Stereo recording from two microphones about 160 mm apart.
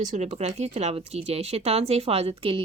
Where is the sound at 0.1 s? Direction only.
40° right (ahead or behind).